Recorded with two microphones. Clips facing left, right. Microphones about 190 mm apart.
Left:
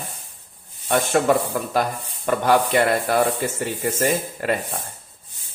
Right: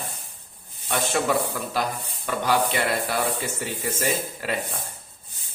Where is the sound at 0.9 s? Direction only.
50° left (ahead or behind).